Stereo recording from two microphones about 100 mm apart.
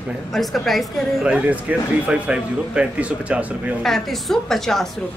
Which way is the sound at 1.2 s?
15° right (ahead or behind).